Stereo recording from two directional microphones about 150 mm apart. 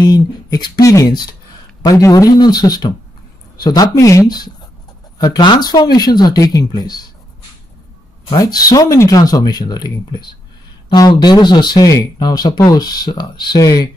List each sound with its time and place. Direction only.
0.0 s speech: 25° left (ahead or behind)
8.4 s speech: 25° left (ahead or behind)